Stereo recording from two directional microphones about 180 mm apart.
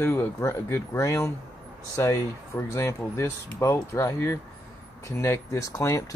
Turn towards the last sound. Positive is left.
turn(degrees=15)  # may be behind; listen again after turning